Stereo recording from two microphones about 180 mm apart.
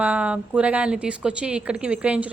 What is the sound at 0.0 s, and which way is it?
A woman's voice, 10° right (ahead or behind).